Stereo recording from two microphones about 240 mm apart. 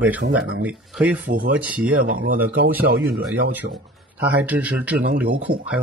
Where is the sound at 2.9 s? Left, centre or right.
Right.